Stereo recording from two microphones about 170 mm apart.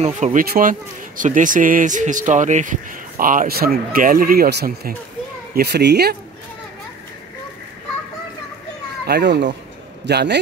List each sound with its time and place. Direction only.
0.0 s speech: 45° right (ahead or behind); by 6.1 s 75° right (ahead or behind)
9.0 s a man's voice: 80° right